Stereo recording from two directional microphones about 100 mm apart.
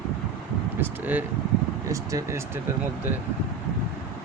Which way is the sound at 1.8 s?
30° right (ahead or behind).